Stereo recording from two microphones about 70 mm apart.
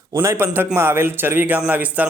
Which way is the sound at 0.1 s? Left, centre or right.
Right.